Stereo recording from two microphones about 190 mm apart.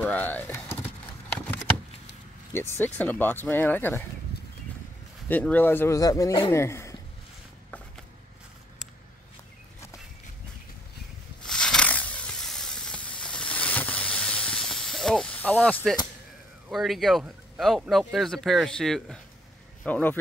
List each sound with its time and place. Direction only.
0.0 s speech: 10° left (ahead or behind)
2.5 s speech: 10° left (ahead or behind)
5.3 s speech: 10° left (ahead or behind)
11.4 s a sound: 5° left (ahead or behind)
16.7 s speech: centre (ahead or behind)